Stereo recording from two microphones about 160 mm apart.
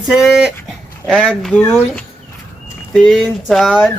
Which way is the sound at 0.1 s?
Centre (ahead or behind).